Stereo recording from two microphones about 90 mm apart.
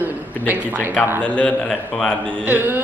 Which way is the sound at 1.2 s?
10° left (ahead or behind).